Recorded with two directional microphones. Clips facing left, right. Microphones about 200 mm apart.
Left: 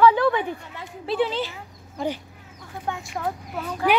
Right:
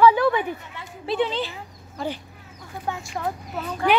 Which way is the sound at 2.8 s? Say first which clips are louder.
Even; centre (ahead or behind).